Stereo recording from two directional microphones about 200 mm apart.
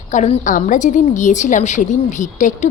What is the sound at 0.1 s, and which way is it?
A woman's voice, 35° left (ahead or behind).